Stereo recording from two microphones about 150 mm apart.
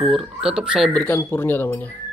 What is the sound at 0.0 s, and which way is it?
Speech, centre (ahead or behind).